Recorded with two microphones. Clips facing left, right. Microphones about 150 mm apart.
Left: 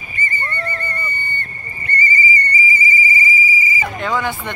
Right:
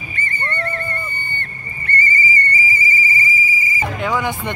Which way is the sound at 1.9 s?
10° left (ahead or behind).